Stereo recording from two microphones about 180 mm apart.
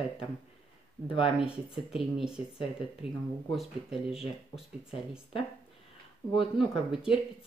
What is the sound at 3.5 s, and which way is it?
Speech, centre (ahead or behind).